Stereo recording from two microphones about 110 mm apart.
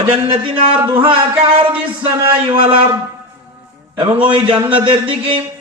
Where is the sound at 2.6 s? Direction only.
45° right (ahead or behind).